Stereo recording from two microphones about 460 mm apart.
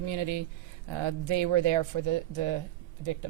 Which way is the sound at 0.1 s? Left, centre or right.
Right.